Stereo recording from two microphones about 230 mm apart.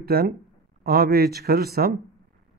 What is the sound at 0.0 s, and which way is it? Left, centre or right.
A man's voice, right.